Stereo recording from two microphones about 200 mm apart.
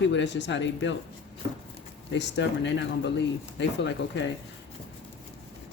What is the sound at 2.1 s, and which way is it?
Speech, 65° left (ahead or behind).